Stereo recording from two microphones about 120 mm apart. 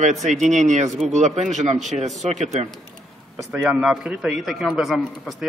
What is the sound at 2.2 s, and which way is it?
Speech, 75° right (ahead or behind).